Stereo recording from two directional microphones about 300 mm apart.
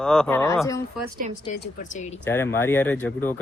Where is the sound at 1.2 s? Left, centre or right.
Right.